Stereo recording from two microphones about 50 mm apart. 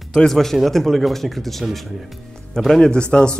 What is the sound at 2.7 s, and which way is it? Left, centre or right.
Speech, centre.